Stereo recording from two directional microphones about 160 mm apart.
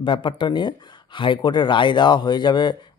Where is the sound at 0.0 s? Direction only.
30° left (ahead or behind).